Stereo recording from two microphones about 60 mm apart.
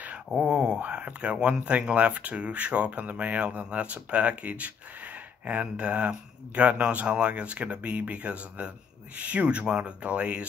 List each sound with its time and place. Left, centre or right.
0.4 s speech: centre